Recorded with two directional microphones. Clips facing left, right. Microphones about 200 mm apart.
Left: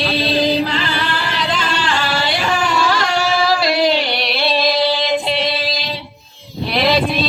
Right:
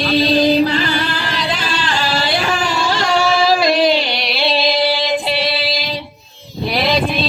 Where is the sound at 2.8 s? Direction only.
25° right (ahead or behind).